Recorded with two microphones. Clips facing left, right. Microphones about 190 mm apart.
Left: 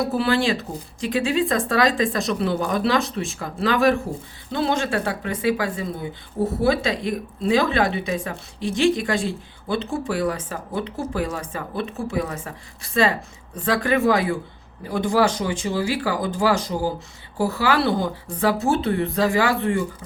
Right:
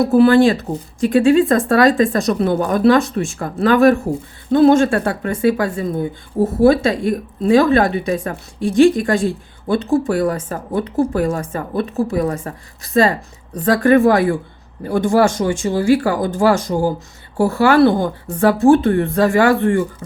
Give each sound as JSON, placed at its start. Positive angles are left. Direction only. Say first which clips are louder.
{"t": 0.1, "sound": "a woman's voice", "louder": "right 10 dB", "side_deg": -50}